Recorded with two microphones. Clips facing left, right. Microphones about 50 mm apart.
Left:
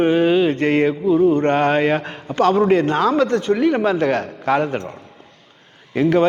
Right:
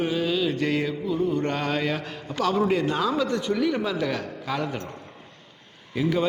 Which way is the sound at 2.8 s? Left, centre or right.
Left.